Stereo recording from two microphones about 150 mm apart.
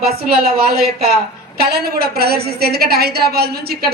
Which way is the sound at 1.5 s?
90° right.